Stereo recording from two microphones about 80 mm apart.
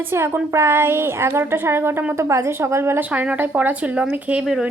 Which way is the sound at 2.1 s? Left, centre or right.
Right.